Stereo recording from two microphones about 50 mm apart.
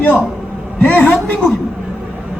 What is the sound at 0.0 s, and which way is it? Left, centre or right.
A man's voice, left.